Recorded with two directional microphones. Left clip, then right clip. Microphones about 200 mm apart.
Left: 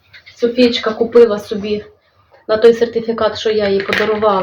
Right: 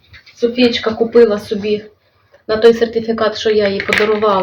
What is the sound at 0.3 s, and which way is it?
Speech, 15° right (ahead or behind).